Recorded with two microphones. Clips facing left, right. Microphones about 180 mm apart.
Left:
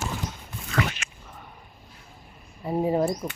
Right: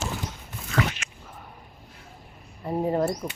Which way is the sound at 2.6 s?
5° left (ahead or behind).